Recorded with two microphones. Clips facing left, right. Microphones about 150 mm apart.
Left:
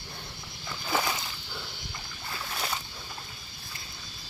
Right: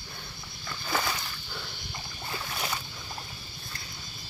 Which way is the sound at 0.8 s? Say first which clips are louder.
Left 1 dB; 10° left (ahead or behind).